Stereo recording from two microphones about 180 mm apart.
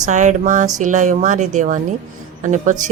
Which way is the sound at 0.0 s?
40° right (ahead or behind).